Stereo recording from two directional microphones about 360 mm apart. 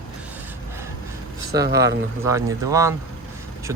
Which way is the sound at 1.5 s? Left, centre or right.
Right.